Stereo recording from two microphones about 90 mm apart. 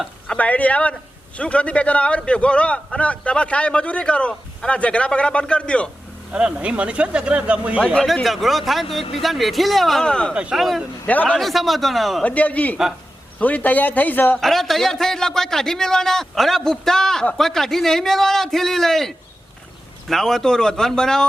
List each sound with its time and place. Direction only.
0.3 s a man's voice: 15° left (ahead or behind)
6.3 s speech: 10° right (ahead or behind)
7.9 s a man's voice: centre (ahead or behind)
10.5 s a man's voice: centre (ahead or behind)
11.0 s a man's voice: 20° left (ahead or behind)
11.3 s a man's voice: centre (ahead or behind)
12.2 s a man's voice: 15° left (ahead or behind)
14.3 s a man's voice: 5° left (ahead or behind)